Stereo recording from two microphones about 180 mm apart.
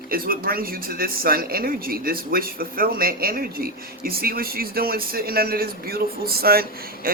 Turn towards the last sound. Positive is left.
turn(degrees=-60)  # may be behind; listen again after turning